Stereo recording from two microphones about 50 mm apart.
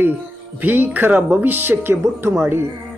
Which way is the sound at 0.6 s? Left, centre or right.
Right.